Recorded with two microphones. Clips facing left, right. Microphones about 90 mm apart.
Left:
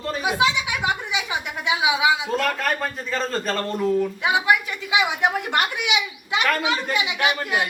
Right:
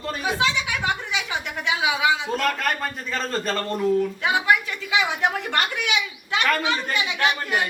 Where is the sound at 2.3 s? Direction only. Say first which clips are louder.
Left 1 dB; centre (ahead or behind).